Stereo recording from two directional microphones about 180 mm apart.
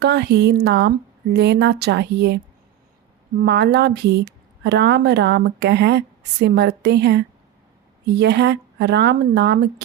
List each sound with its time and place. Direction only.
0.0 s speech: 70° right (ahead or behind)
3.4 s speech: 65° right (ahead or behind)